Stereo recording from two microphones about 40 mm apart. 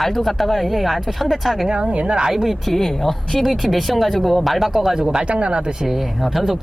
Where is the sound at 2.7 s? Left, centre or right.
Centre.